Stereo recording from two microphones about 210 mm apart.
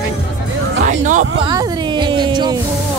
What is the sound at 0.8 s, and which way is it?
Hubbub, 35° right (ahead or behind).